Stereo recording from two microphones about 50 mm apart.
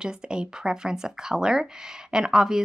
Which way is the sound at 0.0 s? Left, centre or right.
Centre.